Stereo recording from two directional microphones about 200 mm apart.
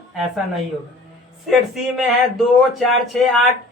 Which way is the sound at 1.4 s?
Centre (ahead or behind).